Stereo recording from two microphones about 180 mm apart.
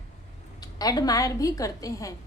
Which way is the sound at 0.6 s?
20° left (ahead or behind).